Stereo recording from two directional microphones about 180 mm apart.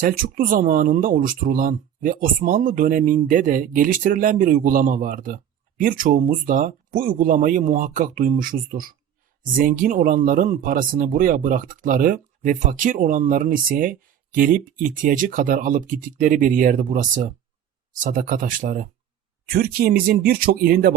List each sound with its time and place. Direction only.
0.0 s speech: 50° right (ahead or behind)
19.5 s speech: 55° right (ahead or behind)